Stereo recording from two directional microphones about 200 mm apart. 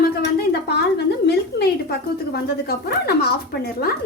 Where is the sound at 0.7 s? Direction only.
55° left (ahead or behind).